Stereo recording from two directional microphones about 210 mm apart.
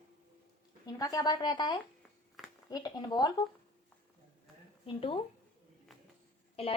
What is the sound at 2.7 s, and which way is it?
Speech, 20° left (ahead or behind).